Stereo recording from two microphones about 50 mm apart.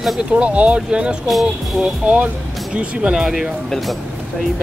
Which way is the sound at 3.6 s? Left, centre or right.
Centre.